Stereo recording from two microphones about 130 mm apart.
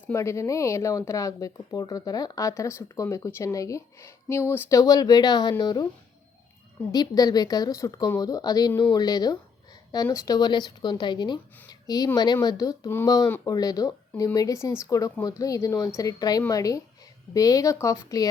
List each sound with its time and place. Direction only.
0.1 s a woman's voice: 20° left (ahead or behind)
6.9 s a woman's voice: 30° left (ahead or behind)
13.2 s speech: 15° left (ahead or behind)
13.5 s a woman's voice: 30° left (ahead or behind)